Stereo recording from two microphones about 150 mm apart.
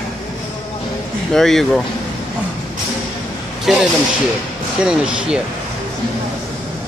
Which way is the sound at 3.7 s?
Centre (ahead or behind).